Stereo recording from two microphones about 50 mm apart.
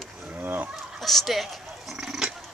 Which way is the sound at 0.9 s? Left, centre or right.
Centre.